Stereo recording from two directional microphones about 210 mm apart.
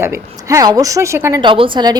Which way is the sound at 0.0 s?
15° right (ahead or behind).